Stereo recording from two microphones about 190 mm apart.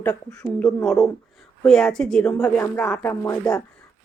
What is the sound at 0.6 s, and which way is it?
Speech, centre (ahead or behind).